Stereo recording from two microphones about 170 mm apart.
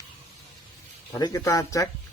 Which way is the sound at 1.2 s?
20° left (ahead or behind).